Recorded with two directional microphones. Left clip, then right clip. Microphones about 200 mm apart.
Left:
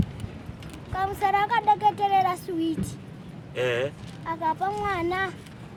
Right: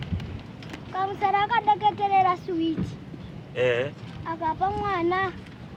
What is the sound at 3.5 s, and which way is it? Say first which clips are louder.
Speech: right 2 dB; 50° left (ahead or behind).